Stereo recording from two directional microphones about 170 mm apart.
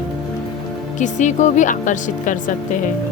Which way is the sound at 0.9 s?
45° left (ahead or behind).